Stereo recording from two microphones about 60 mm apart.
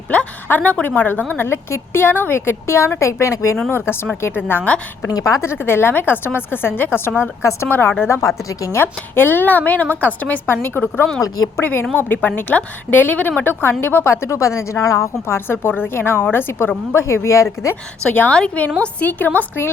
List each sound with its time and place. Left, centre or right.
0.4 s a woman's voice: left
3.7 s a woman's voice: left
5.0 s a woman's voice: left
5.4 s a woman's voice: left
8.0 s speech: left
8.7 s a woman's voice: left
15.6 s a woman's voice: left
16.9 s speech: left
18.1 s speech: left